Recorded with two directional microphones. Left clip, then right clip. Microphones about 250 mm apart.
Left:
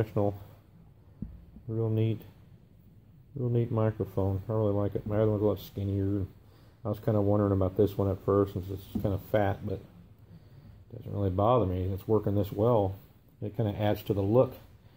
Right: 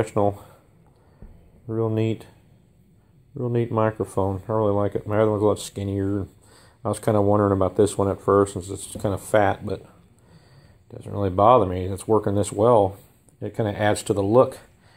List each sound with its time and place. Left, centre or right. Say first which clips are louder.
0.0 s speech: right 8 dB; centre
1.7 s speech: right 8 dB; right
3.3 s speech: right 8 dB; centre
11.0 s speech: right 10 dB; centre